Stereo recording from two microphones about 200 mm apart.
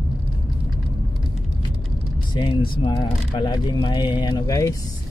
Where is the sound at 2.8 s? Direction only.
25° left (ahead or behind).